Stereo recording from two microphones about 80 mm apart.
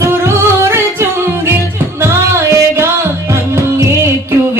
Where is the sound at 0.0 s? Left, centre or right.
Right.